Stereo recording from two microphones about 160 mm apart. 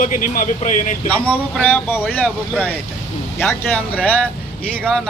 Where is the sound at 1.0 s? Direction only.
10° left (ahead or behind).